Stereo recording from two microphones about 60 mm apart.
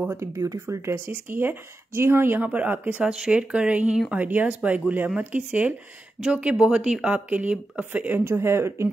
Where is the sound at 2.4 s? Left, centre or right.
Right.